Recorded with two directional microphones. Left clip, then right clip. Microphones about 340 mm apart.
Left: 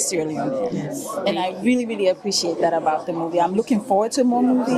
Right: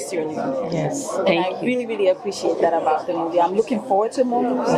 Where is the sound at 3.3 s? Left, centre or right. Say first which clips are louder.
Right 1 dB; left.